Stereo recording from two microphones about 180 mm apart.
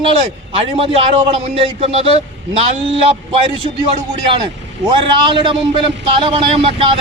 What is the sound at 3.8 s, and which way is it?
A man's voice, 25° right (ahead or behind).